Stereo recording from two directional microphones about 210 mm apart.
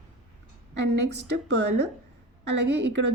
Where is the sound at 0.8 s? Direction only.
55° right (ahead or behind).